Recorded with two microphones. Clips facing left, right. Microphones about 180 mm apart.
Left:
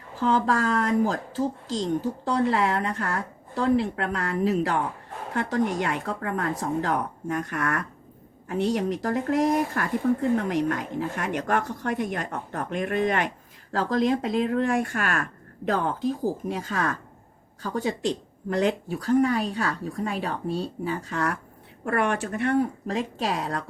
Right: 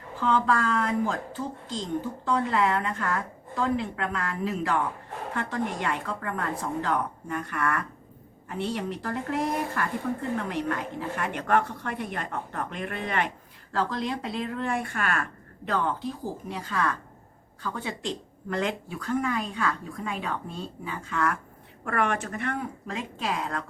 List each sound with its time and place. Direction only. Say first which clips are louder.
0.2 s speech: left 2 dB; 40° left (ahead or behind)
2.2 s speech: left 1 dB; 40° left (ahead or behind)